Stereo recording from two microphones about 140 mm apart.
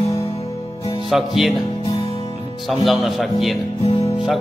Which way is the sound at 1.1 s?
Centre (ahead or behind).